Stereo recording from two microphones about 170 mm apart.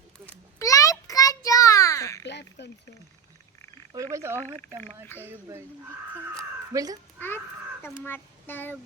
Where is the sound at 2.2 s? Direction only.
90° left.